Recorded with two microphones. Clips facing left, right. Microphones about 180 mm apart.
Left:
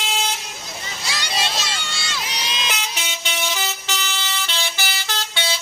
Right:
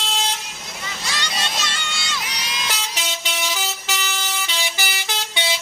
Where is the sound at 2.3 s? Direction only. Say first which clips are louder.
Left 2 dB; 25° left (ahead or behind).